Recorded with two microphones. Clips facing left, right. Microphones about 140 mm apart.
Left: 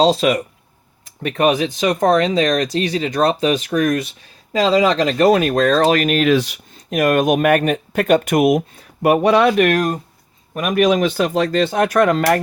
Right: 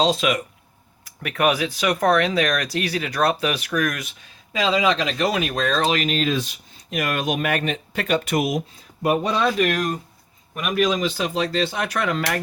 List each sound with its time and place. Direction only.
0.0 s speech: 35° left (ahead or behind)
1.0 s speech: 25° left (ahead or behind)
4.5 s speech: 40° left (ahead or behind); by 6.6 s 75° left (ahead or behind)
6.9 s speech: 45° left (ahead or behind)